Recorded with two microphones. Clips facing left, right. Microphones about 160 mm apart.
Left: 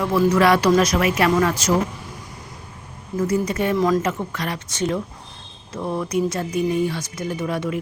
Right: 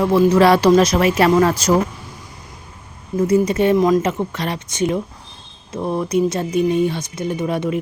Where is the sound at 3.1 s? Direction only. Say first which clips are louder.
Right 5 dB; 25° right (ahead or behind).